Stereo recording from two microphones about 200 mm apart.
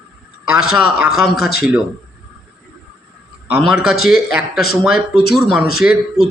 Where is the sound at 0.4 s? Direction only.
5° right (ahead or behind).